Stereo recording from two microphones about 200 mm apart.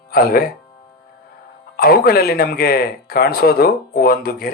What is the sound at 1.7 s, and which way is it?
Speech, 50° left (ahead or behind).